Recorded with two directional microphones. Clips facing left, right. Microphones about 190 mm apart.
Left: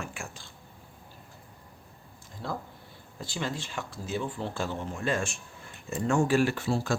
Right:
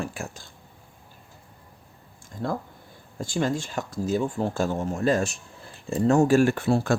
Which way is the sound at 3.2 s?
45° right (ahead or behind).